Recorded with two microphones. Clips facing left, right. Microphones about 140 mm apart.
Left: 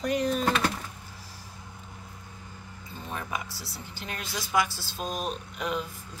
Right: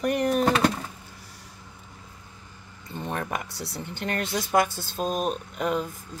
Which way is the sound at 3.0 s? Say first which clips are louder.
Right 4 dB; 65° right (ahead or behind).